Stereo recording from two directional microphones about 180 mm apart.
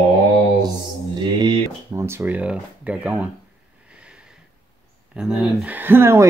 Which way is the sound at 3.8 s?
5° right (ahead or behind).